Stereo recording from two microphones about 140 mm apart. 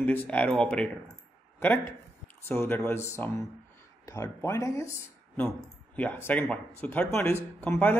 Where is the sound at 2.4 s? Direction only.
15° left (ahead or behind).